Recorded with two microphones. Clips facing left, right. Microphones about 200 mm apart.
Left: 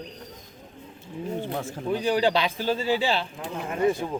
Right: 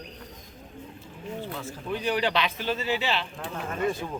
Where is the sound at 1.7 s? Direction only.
30° left (ahead or behind).